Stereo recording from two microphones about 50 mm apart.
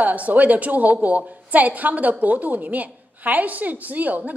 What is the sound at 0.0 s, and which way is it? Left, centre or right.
A woman's voice, right.